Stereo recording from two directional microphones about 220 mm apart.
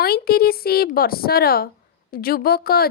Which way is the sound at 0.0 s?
45° left (ahead or behind).